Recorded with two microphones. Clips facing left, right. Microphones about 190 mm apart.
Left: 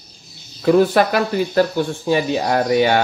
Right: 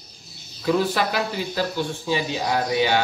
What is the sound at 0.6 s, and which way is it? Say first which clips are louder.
Speech: left 8 dB; 55° left (ahead or behind).